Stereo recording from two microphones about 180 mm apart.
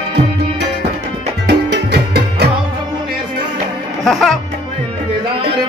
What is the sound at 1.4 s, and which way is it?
Music, 65° right (ahead or behind).